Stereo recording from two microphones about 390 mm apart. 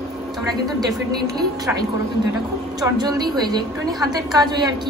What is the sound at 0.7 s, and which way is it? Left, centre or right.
A woman's voice, centre.